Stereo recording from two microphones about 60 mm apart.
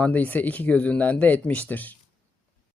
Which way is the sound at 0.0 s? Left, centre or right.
Left.